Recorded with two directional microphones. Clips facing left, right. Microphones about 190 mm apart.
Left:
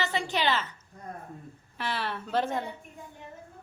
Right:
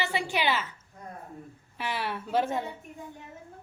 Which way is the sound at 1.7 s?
10° right (ahead or behind).